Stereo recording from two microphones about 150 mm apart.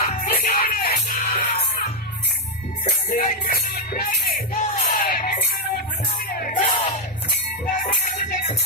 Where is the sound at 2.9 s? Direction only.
60° left (ahead or behind); by 6.5 s 80° left.